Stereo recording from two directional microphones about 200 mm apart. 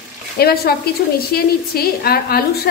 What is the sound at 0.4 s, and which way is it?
Speech, 50° left (ahead or behind).